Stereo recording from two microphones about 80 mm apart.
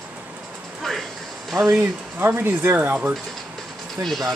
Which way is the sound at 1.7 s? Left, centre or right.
Right.